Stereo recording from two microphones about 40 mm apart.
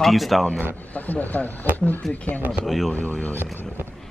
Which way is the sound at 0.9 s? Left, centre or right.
Left.